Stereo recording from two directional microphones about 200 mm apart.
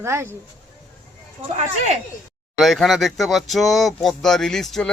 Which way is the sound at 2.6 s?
Centre (ahead or behind).